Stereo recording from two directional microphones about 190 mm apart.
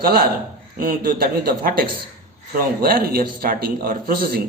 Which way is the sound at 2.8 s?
50° right (ahead or behind).